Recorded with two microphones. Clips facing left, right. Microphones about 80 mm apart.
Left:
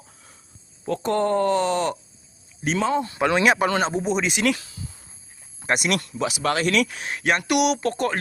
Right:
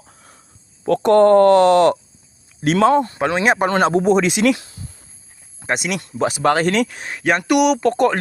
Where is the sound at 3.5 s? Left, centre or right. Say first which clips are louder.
Right 5 dB; right.